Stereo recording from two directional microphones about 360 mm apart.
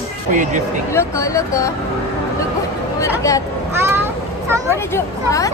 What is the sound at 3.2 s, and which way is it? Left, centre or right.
Speech, centre.